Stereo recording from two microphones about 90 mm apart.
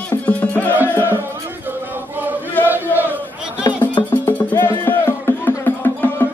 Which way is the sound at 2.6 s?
20° right (ahead or behind).